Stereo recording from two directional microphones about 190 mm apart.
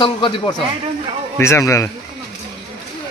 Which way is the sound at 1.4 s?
15° left (ahead or behind).